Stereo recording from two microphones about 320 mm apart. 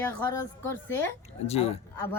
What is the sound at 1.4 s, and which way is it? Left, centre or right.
Speech, centre.